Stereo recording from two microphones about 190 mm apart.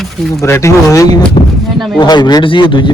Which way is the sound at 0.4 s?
15° left (ahead or behind).